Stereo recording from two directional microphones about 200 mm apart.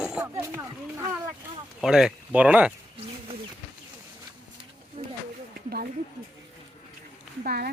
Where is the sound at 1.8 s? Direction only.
Centre (ahead or behind).